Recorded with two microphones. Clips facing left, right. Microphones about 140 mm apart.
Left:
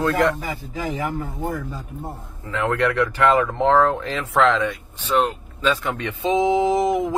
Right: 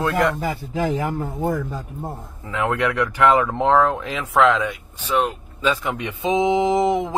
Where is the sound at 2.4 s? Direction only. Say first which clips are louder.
Left 1 dB; 10° right (ahead or behind).